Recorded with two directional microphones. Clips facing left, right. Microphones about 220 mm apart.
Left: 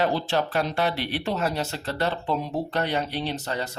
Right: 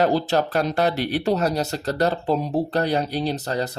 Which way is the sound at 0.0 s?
40° right (ahead or behind).